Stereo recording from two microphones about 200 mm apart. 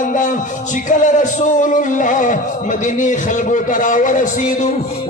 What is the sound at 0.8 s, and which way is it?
Music, 40° left (ahead or behind).